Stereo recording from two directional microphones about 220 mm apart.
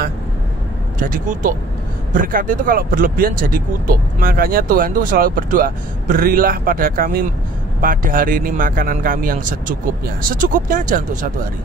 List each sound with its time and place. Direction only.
0.9 s speech: 40° right (ahead or behind)